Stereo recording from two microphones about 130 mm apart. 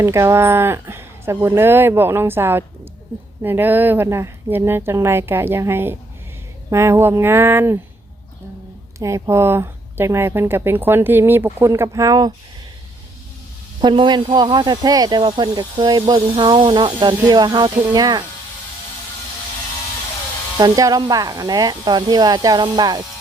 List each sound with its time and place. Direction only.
0.0 s speech: 20° right (ahead or behind)
9.0 s speech: 25° right (ahead or behind)
13.8 s speech: 35° right (ahead or behind)
20.6 s speech: 30° right (ahead or behind)